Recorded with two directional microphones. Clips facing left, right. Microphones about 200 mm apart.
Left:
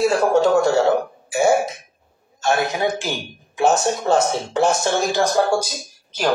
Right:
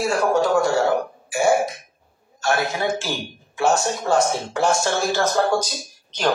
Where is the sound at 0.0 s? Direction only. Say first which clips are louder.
Left 3 dB; 25° left (ahead or behind).